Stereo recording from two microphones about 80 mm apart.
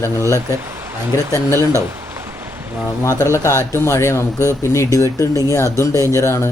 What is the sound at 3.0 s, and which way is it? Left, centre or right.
Speech, left.